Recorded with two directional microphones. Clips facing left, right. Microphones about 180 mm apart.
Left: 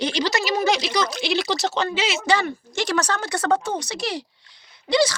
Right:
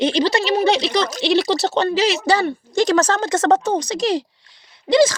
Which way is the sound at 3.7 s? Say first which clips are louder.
Right 8 dB; 15° right (ahead or behind).